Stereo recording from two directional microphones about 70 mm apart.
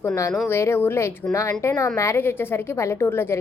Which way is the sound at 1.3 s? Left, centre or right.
Left.